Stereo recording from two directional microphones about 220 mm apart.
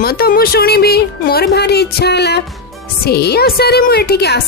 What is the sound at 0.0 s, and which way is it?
A woman's voice, 45° left (ahead or behind).